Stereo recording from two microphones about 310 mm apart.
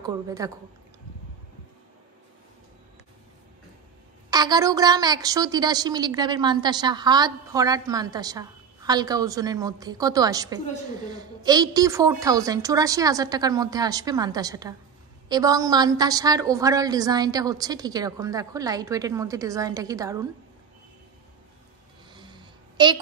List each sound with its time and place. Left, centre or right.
0.0 s speech: centre
4.3 s a woman's voice: centre
22.1 s a sound: centre